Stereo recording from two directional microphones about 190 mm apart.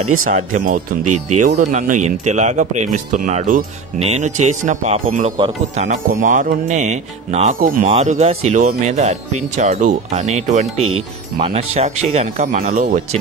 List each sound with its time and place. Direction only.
0.2 s speech: 45° right (ahead or behind)
12.5 s speech: 50° right (ahead or behind)